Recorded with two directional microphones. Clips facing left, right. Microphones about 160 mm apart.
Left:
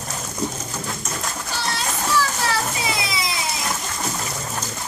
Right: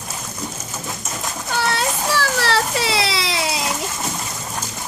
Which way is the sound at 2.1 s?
75° right (ahead or behind).